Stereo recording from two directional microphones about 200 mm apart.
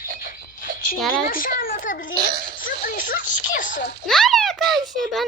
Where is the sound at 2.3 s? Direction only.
50° right (ahead or behind).